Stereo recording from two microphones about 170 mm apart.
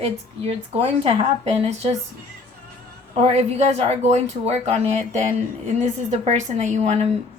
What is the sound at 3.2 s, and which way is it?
Speech, 35° right (ahead or behind).